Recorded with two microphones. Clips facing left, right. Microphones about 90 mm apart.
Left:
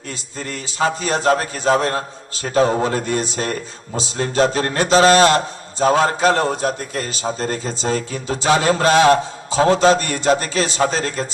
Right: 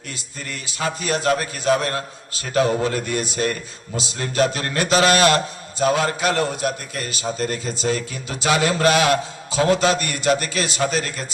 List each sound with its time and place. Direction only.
0.1 s a man's voice: 35° left (ahead or behind)